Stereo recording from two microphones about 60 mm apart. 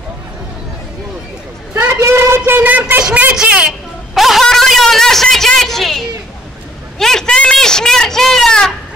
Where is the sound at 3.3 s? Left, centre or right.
Right.